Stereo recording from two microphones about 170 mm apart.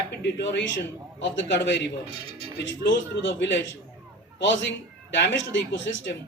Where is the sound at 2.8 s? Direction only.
90° left.